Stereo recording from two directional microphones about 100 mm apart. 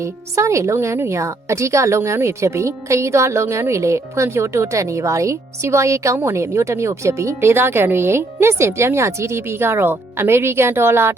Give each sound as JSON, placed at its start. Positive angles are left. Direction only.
{"t": 0.0, "sound": "speech", "side_deg": -30}